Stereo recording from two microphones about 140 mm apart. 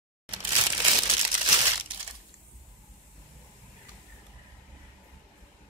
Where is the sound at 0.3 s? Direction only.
30° right (ahead or behind).